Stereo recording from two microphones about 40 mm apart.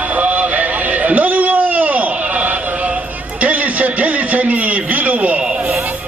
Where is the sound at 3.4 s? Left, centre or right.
Right.